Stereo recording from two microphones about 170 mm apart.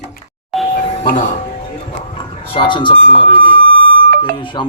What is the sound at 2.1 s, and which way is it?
Speech, 30° left (ahead or behind).